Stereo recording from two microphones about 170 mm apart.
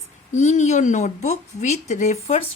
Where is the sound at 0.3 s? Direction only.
45° left (ahead or behind).